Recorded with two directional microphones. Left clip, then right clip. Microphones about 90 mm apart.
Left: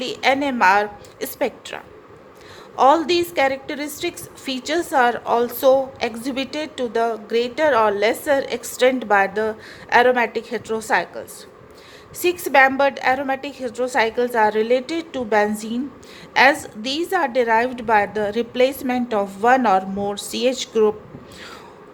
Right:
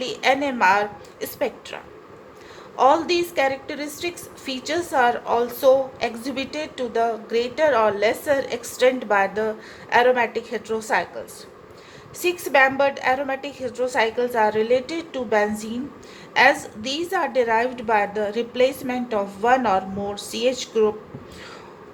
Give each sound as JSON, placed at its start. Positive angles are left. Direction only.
{"t": 0.0, "sound": "a woman's voice", "side_deg": 55}
{"t": 2.7, "sound": "a woman's voice", "side_deg": 80}
{"t": 12.2, "sound": "a woman's voice", "side_deg": 80}